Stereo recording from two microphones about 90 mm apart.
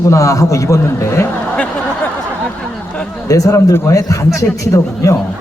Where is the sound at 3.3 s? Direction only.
40° left (ahead or behind).